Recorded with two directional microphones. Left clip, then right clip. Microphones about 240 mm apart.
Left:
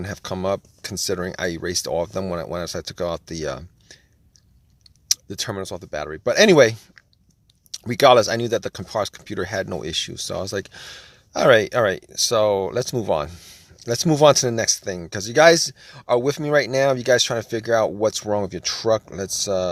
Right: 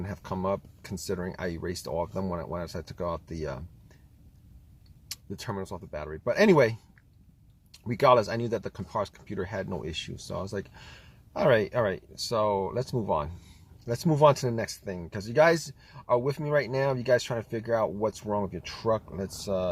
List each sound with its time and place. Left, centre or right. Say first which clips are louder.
0.0 s speech: left 7 dB; left
5.0 s speech: left 13 dB; left